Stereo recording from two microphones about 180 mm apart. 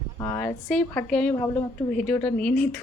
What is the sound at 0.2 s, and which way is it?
Speech, 15° left (ahead or behind).